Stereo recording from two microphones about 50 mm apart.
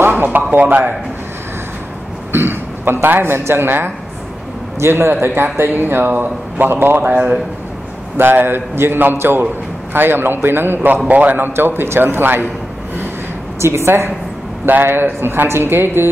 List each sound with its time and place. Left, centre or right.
0.1 s a man's voice: right
2.3 s a man's voice: right
8.2 s a man's voice: right
11.1 s a man's voice: right
13.6 s a woman's voice: right
14.7 s a man's voice: right